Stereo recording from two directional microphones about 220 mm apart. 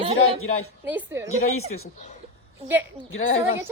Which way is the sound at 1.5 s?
75° left (ahead or behind).